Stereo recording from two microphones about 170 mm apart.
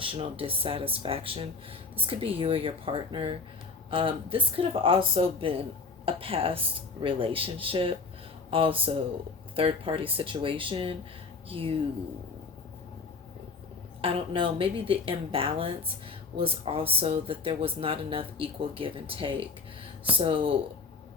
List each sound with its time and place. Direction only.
0.0 s speech: 30° right (ahead or behind)
14.0 s speech: 30° right (ahead or behind)